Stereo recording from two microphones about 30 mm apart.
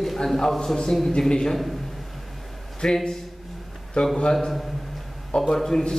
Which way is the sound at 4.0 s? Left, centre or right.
Left.